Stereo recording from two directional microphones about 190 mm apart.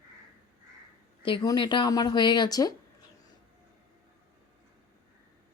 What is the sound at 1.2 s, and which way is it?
Speech, 25° left (ahead or behind).